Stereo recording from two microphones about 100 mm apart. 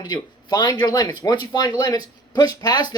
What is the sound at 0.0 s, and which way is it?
Speech, 45° left (ahead or behind).